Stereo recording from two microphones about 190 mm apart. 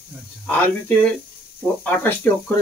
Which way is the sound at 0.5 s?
10° left (ahead or behind).